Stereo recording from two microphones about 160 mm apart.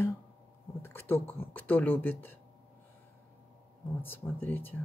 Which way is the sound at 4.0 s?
10° left (ahead or behind).